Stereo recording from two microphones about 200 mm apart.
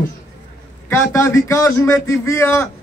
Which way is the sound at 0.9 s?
15° left (ahead or behind).